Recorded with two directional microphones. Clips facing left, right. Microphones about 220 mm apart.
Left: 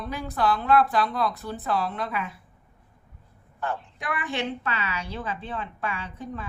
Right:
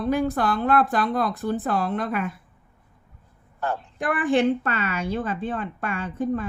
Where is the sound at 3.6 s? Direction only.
40° right (ahead or behind).